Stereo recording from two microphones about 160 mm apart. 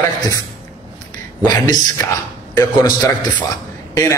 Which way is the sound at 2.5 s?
25° left (ahead or behind).